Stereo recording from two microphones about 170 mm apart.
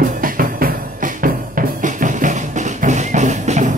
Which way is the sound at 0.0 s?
55° right (ahead or behind).